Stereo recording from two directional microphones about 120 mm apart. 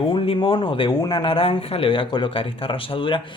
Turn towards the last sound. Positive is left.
turn(degrees=45)  # may be behind; listen again after turning